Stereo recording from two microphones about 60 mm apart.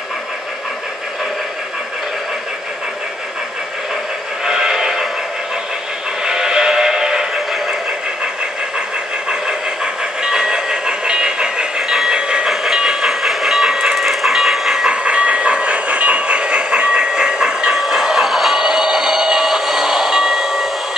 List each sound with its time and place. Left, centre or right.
4.5 s train: centre
6.2 s music: centre
10.2 s train: centre
14.9 s train: centre